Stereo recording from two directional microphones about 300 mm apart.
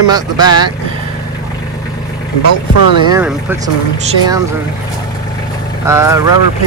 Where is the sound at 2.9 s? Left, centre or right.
Centre.